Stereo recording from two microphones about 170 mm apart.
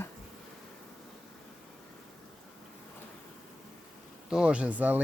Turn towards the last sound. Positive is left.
turn(degrees=-10)  # may be behind; listen again after turning